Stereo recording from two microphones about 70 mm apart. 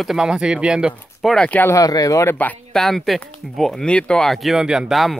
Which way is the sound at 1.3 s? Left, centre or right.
Centre.